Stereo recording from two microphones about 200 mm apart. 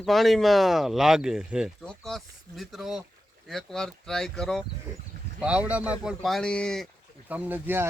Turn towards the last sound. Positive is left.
turn(degrees=-10)  # may be behind; listen again after turning